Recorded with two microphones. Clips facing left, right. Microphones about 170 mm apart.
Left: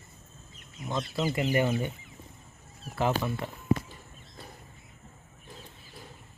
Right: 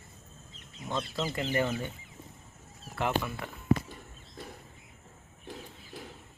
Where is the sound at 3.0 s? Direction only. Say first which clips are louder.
Left 3 dB; 20° left (ahead or behind).